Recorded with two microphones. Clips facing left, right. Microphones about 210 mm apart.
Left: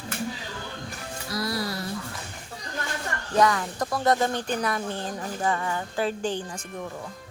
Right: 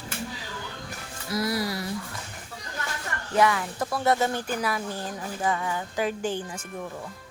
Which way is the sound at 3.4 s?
5° right (ahead or behind).